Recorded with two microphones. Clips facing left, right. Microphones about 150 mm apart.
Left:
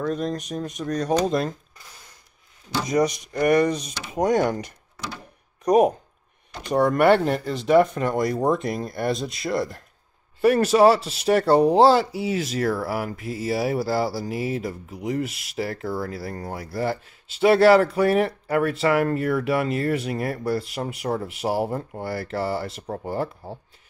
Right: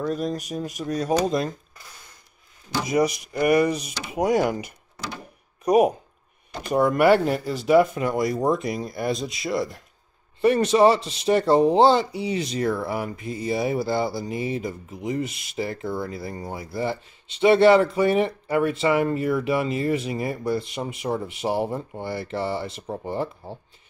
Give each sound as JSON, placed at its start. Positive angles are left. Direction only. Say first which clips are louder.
{"t": 0.0, "sound": "speech", "louder": "even", "side_deg": -5}
{"t": 2.7, "sound": "speech", "louder": "even", "side_deg": -10}
{"t": 5.0, "sound": "a sound", "louder": "even", "side_deg": -20}
{"t": 5.7, "sound": "speech", "louder": "left 1 dB", "side_deg": -10}